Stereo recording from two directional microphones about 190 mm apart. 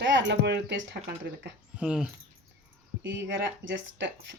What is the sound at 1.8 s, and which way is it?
Speech, 5° right (ahead or behind).